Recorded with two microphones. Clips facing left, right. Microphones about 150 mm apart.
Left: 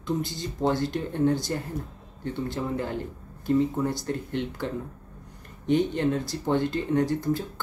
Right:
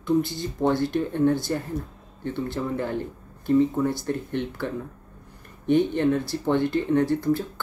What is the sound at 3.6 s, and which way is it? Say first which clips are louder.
Speech: right 3 dB; 20° left (ahead or behind).